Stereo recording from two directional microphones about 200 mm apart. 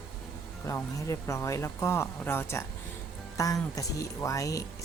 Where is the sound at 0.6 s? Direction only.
15° left (ahead or behind).